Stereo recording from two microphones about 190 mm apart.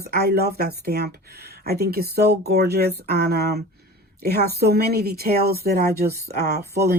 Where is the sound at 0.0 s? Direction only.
55° right (ahead or behind).